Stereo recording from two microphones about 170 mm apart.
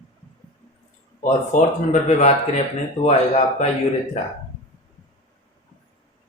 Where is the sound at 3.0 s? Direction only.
40° left (ahead or behind).